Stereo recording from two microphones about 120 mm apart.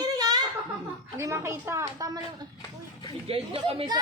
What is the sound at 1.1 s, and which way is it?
A woman's voice, 25° right (ahead or behind).